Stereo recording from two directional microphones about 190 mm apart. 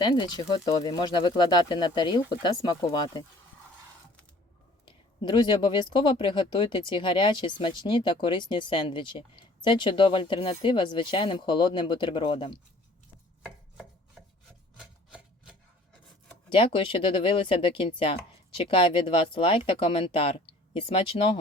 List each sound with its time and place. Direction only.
0.0 s speech: 25° left (ahead or behind)
4.9 s speech: 25° left (ahead or behind)
14.8 s rub: 5° right (ahead or behind)
16.6 s speech: 25° left (ahead or behind)